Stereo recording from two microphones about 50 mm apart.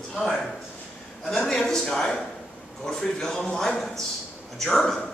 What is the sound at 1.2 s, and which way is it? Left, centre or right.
A man's voice, centre.